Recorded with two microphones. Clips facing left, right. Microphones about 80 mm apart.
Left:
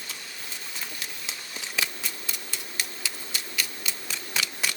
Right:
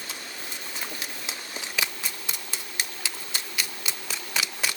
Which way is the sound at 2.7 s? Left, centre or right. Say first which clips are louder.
Right 1 dB; right.